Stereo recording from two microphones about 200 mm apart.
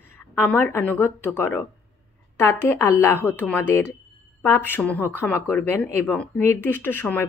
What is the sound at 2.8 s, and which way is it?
A woman's voice, 15° left (ahead or behind).